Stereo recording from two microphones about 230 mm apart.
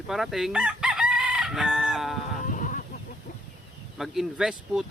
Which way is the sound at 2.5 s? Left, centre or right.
Left.